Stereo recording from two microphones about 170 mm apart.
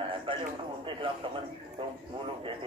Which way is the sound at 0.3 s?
30° right (ahead or behind).